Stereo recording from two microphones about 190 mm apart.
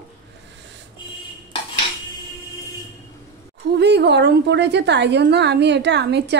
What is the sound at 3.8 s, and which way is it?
A woman's voice, 65° right (ahead or behind).